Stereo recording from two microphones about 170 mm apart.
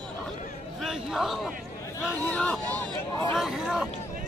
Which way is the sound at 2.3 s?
10° left (ahead or behind).